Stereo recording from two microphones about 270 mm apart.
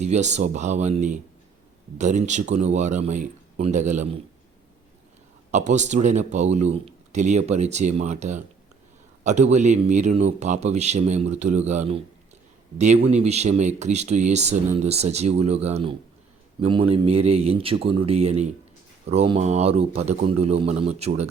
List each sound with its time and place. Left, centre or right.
0.0 s speech: right
5.5 s speech: right